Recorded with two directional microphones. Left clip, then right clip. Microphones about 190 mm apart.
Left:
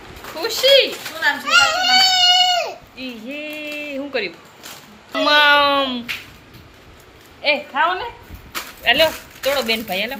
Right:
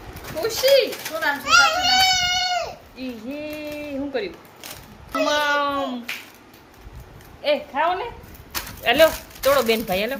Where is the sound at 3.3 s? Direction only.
5° right (ahead or behind).